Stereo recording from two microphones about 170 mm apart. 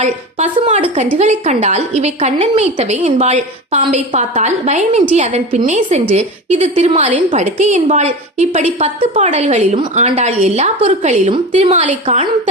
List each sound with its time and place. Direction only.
0.0 s a woman's voice: 45° right (ahead or behind)
12.0 s a woman's voice: 35° right (ahead or behind)